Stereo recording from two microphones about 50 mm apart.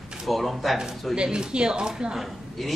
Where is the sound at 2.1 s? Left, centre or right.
Centre.